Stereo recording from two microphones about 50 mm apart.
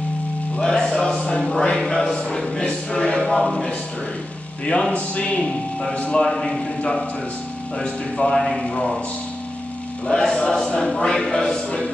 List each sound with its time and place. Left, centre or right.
0.6 s music: centre
1.5 s a sound: centre
4.9 s speech: left
6.1 s choir: centre
6.8 s a man's voice: centre
7.8 s choir: centre
10.0 s choir: centre